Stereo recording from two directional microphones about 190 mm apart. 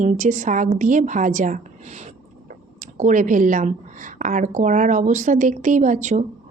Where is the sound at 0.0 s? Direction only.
40° right (ahead or behind).